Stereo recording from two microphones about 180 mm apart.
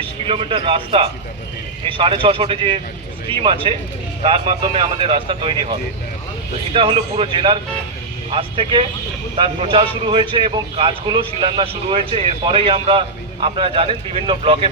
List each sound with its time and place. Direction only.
0.0 s a man's voice: 30° right (ahead or behind)
6.7 s speech: 30° right (ahead or behind)